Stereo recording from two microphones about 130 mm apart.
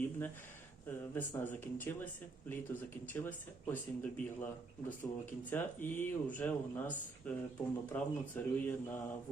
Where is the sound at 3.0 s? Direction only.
15° left (ahead or behind).